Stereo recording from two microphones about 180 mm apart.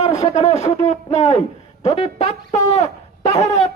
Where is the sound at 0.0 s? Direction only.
40° left (ahead or behind).